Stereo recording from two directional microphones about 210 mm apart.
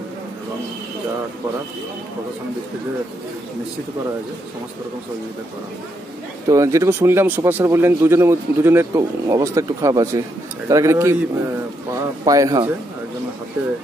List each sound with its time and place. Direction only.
6.5 s speech: 15° right (ahead or behind)